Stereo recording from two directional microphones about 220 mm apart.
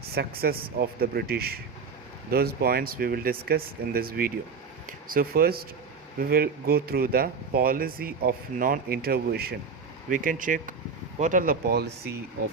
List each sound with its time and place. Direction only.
0.1 s speech: 45° right (ahead or behind)